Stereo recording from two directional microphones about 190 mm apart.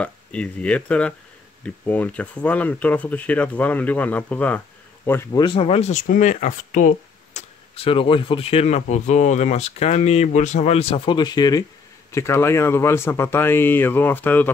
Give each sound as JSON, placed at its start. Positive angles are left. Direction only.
{"t": 0.0, "sound": "speech", "side_deg": 5}
{"t": 5.4, "sound": "speech", "side_deg": 25}
{"t": 7.3, "sound": "speech", "side_deg": 30}